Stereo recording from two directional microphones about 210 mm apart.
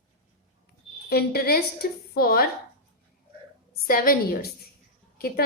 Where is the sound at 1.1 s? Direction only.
50° left (ahead or behind).